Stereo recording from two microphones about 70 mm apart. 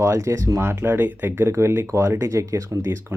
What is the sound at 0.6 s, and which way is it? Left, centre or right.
Speech, right.